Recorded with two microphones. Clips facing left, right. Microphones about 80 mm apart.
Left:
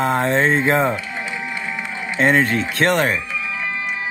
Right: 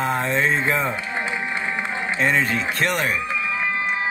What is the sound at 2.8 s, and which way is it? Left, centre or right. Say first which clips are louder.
Speech: left 6 dB; left.